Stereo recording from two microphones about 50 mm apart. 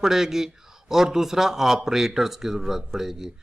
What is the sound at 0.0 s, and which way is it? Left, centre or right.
Speech, centre.